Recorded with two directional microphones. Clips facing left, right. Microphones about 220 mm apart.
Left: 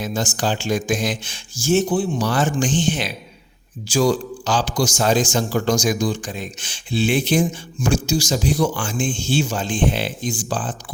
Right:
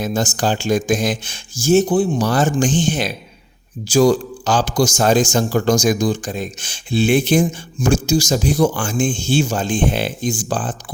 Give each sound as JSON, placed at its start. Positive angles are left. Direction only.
{"t": 0.0, "sound": "a man's voice", "side_deg": -45}